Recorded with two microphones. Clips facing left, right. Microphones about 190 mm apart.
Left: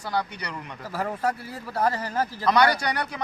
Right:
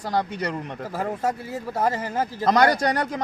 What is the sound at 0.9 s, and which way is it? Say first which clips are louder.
Speech: right 1 dB; 20° right (ahead or behind).